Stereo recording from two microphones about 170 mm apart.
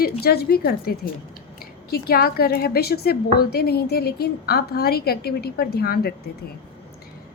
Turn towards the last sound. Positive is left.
turn(degrees=65)  # may be behind; listen again after turning